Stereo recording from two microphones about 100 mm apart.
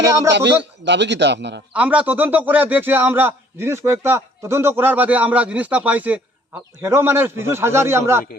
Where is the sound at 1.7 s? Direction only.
15° right (ahead or behind).